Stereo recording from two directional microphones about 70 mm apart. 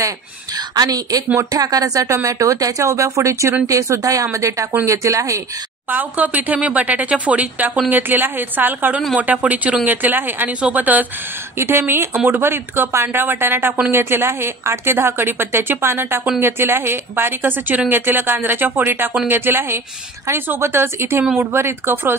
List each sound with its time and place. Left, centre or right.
0.6 s a woman's voice: right
5.9 s a woman's voice: right